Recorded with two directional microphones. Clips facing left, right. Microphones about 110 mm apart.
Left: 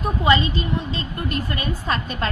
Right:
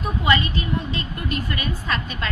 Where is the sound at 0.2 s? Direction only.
25° left (ahead or behind).